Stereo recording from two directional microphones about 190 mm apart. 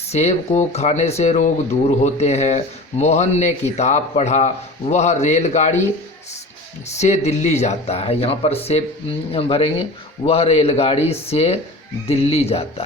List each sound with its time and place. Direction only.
0.1 s speech: 35° left (ahead or behind)
6.9 s speech: 35° left (ahead or behind)